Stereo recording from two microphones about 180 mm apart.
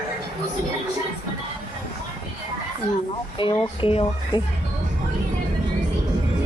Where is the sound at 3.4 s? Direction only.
25° left (ahead or behind).